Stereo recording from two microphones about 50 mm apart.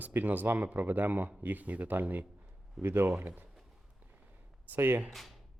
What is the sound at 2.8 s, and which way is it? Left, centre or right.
Speech, right.